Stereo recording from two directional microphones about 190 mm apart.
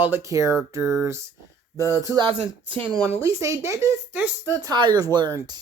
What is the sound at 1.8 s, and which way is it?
Speech, 15° left (ahead or behind).